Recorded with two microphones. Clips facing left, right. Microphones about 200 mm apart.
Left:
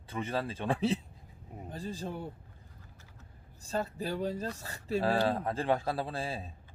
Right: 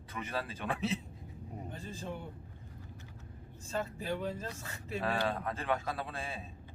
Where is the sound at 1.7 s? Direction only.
35° left (ahead or behind).